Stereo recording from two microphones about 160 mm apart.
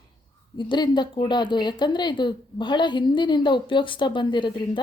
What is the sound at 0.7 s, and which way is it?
A woman's voice, 30° left (ahead or behind).